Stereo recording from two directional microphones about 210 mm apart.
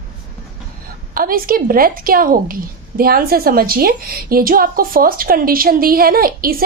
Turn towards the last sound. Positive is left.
turn(degrees=-45)  # may be behind; listen again after turning